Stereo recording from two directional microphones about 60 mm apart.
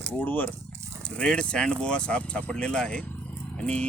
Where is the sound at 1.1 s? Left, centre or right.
Centre.